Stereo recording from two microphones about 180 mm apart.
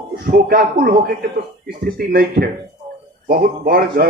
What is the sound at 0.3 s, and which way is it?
Speech, 55° right (ahead or behind).